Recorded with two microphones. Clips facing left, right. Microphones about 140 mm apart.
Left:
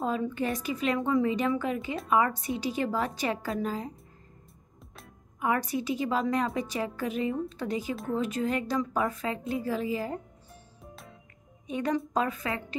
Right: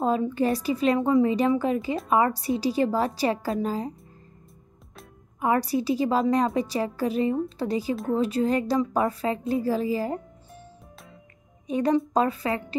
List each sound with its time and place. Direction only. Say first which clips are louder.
0.0 s a woman's voice: right 6 dB; 30° right (ahead or behind)
5.4 s a woman's voice: right 5 dB; 35° right (ahead or behind)
7.9 s speech: right 5 dB; centre (ahead or behind)
8.2 s a woman's voice: right 6 dB; 35° right (ahead or behind)
11.6 s a woman's voice: right 6 dB; 35° right (ahead or behind)